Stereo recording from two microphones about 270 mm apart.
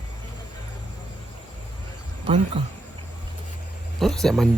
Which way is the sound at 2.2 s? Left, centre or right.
Right.